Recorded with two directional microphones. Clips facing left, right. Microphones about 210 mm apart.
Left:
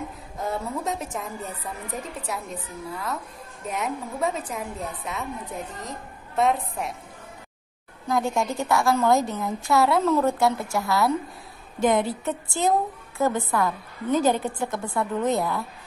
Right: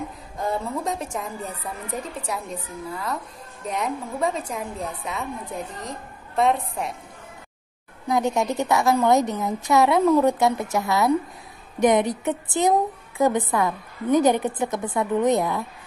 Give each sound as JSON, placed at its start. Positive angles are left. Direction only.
{"t": 0.4, "sound": "a woman's voice", "side_deg": 0}
{"t": 8.1, "sound": "a woman's voice", "side_deg": -20}